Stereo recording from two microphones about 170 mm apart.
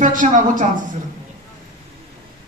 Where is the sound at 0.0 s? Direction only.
50° right (ahead or behind).